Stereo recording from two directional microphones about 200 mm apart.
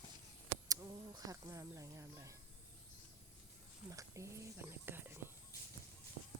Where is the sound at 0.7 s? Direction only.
20° right (ahead or behind).